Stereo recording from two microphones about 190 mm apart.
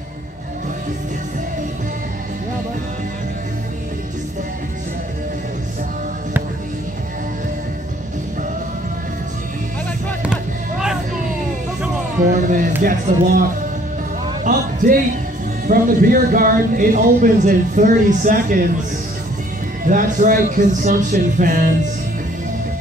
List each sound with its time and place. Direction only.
10.2 s music: 5° right (ahead or behind)
12.3 s a man's voice: 45° right (ahead or behind)
19.9 s a man's voice: 45° right (ahead or behind)